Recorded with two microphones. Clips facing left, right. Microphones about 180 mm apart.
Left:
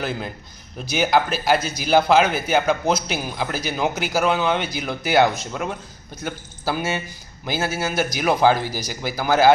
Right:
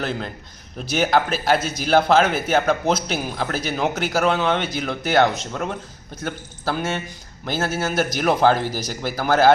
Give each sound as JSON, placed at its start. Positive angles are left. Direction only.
{"t": 0.8, "sound": "a man's voice", "side_deg": 0}